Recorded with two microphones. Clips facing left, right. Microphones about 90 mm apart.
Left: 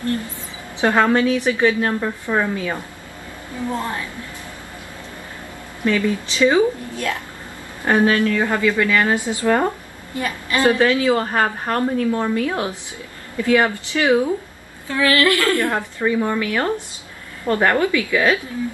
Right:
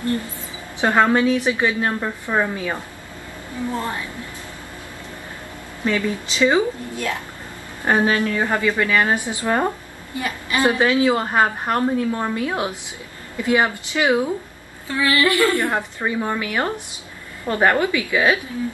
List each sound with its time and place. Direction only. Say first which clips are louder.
0.7 s a woman's voice: even; 15° right (ahead or behind)
5.9 s a woman's voice: left 3 dB; 20° right (ahead or behind)